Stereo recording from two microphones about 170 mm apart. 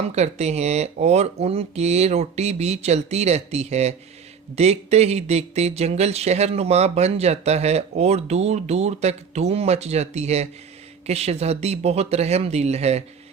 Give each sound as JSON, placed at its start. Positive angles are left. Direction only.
{"t": 0.2, "sound": "speech", "side_deg": -40}